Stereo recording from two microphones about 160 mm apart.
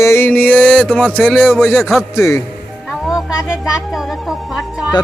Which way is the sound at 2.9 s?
5° right (ahead or behind).